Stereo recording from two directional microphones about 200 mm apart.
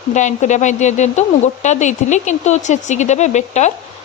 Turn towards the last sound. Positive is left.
turn(degrees=35)  # may be behind; listen again after turning